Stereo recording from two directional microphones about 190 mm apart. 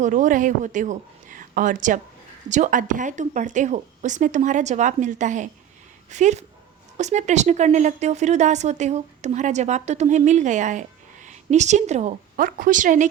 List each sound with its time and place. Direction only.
0.0 s speech: 40° right (ahead or behind)